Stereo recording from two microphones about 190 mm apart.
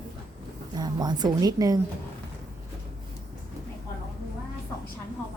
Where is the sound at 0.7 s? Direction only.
20° right (ahead or behind).